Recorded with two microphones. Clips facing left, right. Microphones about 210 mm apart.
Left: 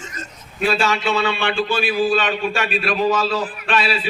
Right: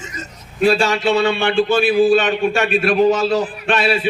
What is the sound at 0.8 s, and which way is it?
Speech, 40° right (ahead or behind).